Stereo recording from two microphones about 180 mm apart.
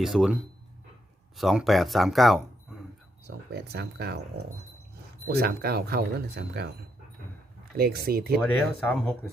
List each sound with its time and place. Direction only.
0.0 s speech: centre (ahead or behind)
1.4 s speech: centre (ahead or behind)
3.2 s speech: 65° right (ahead or behind)
5.3 s speech: 60° right (ahead or behind)
7.8 s speech: 60° right (ahead or behind)
8.9 s speech: 5° left (ahead or behind)